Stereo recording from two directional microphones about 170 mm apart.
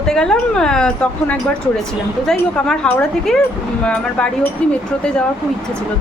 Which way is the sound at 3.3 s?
5° left (ahead or behind).